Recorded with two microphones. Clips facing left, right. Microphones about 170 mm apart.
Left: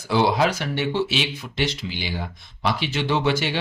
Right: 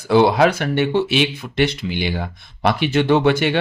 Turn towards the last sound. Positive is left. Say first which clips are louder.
# right 7 dB
turn(degrees=-60)  # may be behind; listen again after turning